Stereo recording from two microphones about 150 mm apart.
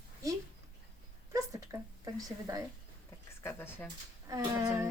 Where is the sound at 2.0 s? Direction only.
20° right (ahead or behind).